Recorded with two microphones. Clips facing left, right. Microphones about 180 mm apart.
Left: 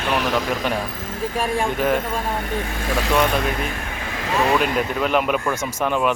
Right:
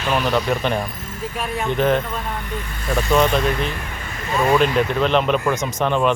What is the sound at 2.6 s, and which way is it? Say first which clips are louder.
Speech: left 4 dB; 90° left.